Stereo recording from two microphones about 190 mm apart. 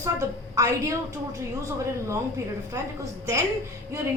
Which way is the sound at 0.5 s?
15° right (ahead or behind).